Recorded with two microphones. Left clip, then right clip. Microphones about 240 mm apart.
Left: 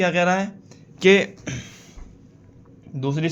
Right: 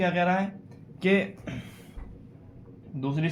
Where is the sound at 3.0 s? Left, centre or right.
Left.